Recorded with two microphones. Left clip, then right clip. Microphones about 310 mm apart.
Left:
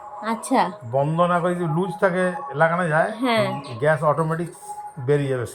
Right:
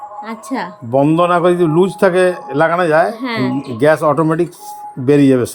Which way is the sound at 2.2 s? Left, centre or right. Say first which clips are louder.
Right 8 dB; right.